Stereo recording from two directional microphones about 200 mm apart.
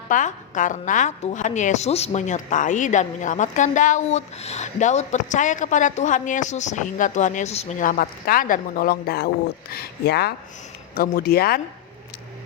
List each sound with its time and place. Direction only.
0.1 s a woman's voice: 40° left (ahead or behind)